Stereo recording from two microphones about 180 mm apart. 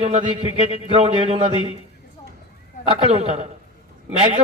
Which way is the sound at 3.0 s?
30° right (ahead or behind).